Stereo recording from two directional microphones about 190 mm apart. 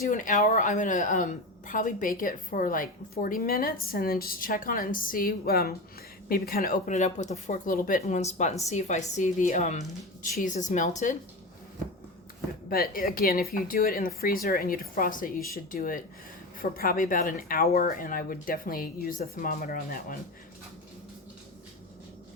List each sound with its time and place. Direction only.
0.1 s speech: 45° left (ahead or behind)
12.6 s speech: 50° left (ahead or behind)